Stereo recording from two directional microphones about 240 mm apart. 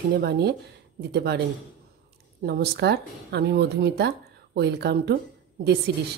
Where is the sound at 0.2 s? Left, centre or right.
Right.